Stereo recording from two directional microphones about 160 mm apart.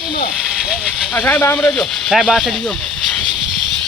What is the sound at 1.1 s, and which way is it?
Speech, 10° left (ahead or behind).